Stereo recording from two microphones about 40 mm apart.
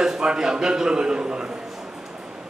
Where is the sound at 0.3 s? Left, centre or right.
Centre.